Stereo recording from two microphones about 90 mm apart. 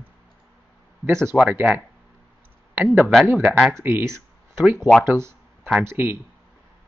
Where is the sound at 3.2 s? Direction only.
15° right (ahead or behind).